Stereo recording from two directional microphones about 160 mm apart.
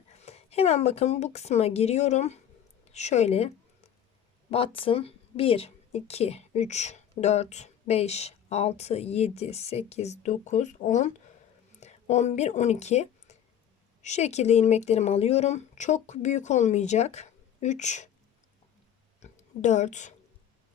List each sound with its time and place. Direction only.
0.1 s a woman's voice: 40° left (ahead or behind)
4.5 s speech: 35° left (ahead or behind)
19.2 s oink: 45° left (ahead or behind)